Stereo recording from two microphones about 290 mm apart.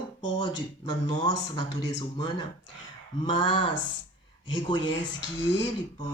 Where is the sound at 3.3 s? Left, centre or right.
Centre.